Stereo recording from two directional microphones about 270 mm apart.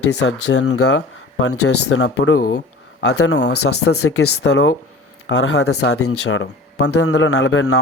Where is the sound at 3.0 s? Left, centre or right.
Left.